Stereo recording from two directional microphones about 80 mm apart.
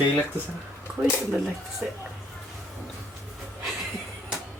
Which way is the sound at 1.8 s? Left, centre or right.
Centre.